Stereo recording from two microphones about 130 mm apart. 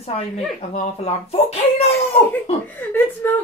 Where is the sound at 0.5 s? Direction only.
55° left (ahead or behind).